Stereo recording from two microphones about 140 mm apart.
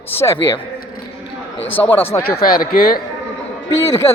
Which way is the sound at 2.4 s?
90° left.